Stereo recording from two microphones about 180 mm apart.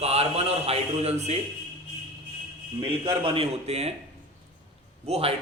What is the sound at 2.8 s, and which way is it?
A man's voice, 30° right (ahead or behind).